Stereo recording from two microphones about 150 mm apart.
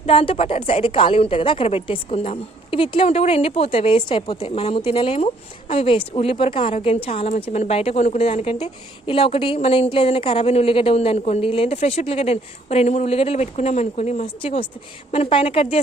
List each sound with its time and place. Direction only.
0.0 s a woman's voice: 40° left (ahead or behind)